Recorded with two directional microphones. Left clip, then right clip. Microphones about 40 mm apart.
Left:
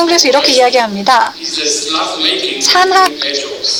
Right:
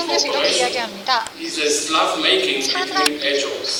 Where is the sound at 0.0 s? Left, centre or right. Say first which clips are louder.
Left 9 dB; left.